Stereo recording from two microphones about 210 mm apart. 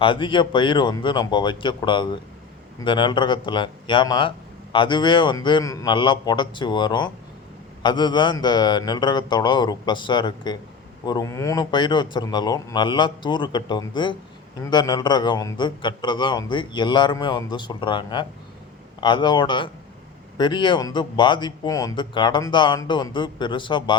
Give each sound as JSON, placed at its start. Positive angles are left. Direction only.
{"t": 0.0, "sound": "a man's voice", "side_deg": 25}